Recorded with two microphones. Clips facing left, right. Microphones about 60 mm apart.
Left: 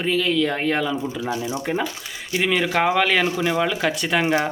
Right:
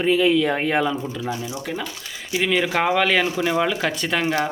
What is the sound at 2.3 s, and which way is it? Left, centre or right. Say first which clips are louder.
A man's voice: even; centre.